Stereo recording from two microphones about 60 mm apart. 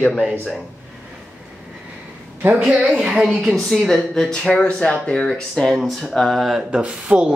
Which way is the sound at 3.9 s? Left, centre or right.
Centre.